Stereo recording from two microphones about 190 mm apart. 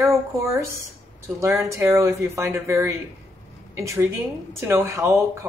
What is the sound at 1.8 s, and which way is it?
A woman's voice, 15° right (ahead or behind).